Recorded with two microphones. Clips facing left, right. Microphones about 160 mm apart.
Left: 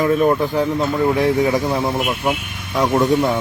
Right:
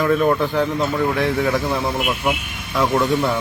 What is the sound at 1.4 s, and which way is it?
Speech, 15° left (ahead or behind).